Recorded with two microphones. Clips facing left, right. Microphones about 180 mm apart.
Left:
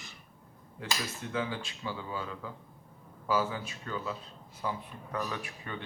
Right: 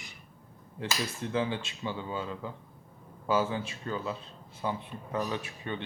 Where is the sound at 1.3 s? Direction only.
25° right (ahead or behind).